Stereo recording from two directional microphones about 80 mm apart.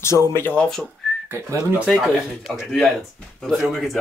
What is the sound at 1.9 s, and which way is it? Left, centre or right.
Speech, centre.